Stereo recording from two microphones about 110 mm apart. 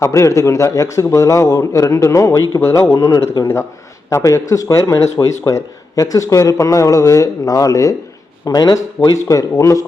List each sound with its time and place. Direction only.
0.0 s a man's voice: 25° left (ahead or behind)